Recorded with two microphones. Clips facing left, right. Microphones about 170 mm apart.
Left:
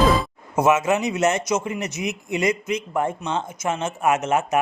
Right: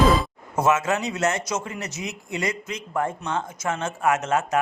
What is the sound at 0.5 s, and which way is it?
A man's voice, 15° left (ahead or behind).